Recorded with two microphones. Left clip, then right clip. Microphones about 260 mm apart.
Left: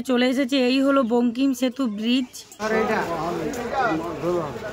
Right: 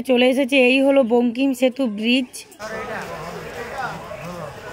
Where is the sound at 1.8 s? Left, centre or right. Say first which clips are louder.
Right 4 dB; left.